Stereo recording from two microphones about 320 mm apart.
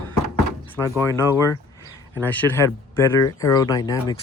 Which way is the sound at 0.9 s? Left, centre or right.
Centre.